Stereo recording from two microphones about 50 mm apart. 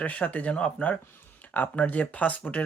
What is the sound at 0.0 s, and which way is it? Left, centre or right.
Speech, left.